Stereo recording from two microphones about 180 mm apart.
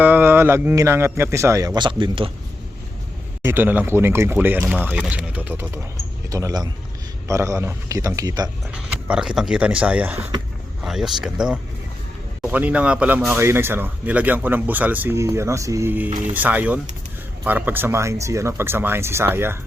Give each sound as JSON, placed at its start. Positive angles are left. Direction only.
{"t": 0.0, "sound": "speech", "side_deg": -10}
{"t": 3.4, "sound": "speech", "side_deg": -10}
{"t": 8.7, "sound": "speech", "side_deg": -5}